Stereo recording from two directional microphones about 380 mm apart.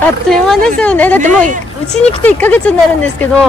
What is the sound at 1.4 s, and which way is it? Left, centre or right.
Speech, right.